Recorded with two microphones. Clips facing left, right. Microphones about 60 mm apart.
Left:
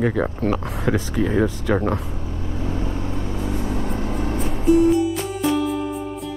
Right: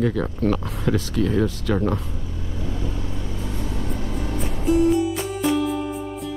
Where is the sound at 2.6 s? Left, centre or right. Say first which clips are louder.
Left 3 dB; left.